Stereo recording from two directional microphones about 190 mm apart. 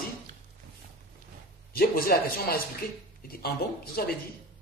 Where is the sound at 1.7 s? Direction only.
50° left (ahead or behind).